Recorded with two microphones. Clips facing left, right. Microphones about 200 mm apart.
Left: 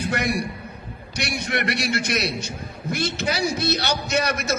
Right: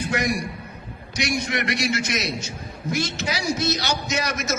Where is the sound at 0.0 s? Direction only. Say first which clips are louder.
Even; 60° left (ahead or behind).